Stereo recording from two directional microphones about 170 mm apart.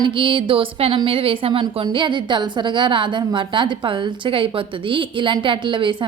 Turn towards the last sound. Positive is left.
turn(degrees=-30)  # may be behind; listen again after turning